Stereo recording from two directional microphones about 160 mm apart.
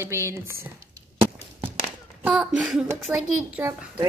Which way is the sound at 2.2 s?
5° right (ahead or behind).